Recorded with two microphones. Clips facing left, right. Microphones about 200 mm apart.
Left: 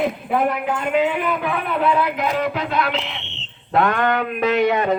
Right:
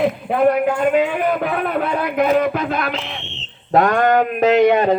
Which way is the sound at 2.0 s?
50° right (ahead or behind).